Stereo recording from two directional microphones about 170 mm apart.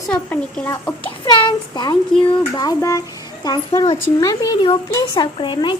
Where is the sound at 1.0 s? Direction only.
30° left (ahead or behind).